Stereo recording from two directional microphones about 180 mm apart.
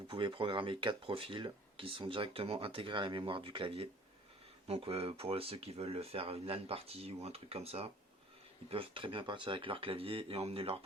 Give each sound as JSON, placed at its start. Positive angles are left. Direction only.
{"t": 0.1, "sound": "speech", "side_deg": -30}